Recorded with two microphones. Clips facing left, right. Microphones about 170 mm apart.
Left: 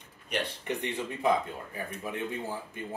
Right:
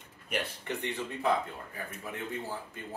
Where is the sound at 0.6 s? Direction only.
15° left (ahead or behind).